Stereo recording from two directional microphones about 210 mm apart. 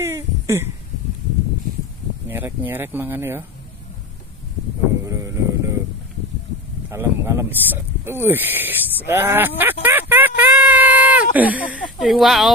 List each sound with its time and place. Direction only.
0.0 s a sound: 10° right (ahead or behind)
2.2 s speech: 10° right (ahead or behind)
5.0 s sheep: 15° right (ahead or behind)
6.9 s speech: 15° right (ahead or behind)